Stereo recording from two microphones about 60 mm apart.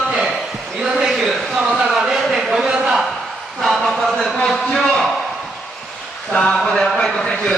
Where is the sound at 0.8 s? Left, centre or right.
Centre.